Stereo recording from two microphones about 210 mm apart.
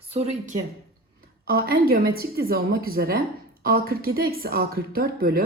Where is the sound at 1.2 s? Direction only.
45° right (ahead or behind).